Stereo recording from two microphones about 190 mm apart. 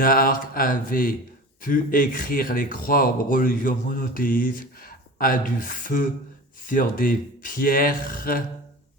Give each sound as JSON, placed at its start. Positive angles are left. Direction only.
{"t": 0.0, "sound": "speech", "side_deg": 50}